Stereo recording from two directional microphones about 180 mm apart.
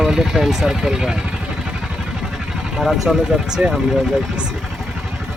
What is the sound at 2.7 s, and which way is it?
Speech, centre (ahead or behind).